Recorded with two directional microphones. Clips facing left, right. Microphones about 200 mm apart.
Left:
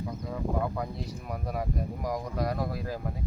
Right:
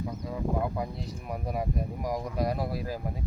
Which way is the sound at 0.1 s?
Centre (ahead or behind).